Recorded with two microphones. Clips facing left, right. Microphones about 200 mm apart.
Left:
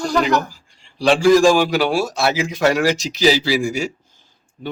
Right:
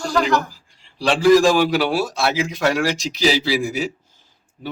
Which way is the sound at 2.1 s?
50° left (ahead or behind).